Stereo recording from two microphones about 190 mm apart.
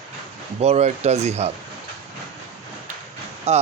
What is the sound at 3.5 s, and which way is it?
Speech, 35° right (ahead or behind).